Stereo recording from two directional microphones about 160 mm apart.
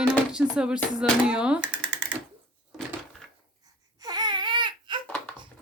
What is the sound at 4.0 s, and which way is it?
Baby cry, 25° right (ahead or behind).